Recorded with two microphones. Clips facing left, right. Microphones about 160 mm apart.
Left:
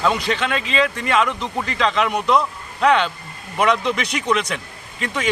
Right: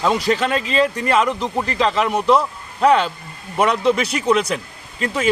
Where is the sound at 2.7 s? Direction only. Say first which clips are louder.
Right 2 dB; 35° right (ahead or behind).